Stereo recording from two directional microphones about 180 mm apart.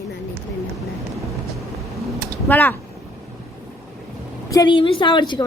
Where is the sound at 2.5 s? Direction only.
10° left (ahead or behind).